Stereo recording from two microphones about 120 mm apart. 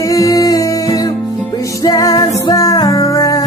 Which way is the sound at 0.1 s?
30° left (ahead or behind).